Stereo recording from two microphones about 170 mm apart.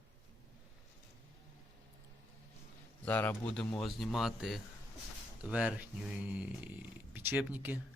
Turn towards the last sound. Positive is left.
turn(degrees=-10)  # may be behind; listen again after turning